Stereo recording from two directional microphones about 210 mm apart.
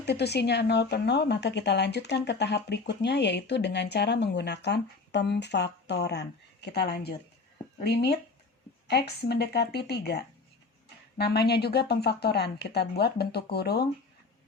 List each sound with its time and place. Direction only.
0.0 s speech: 50° left (ahead or behind)